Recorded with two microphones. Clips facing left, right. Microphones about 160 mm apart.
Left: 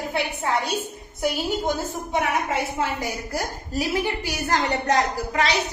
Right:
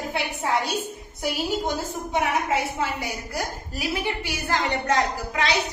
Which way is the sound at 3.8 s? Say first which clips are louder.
Left 3 dB; 40° left (ahead or behind).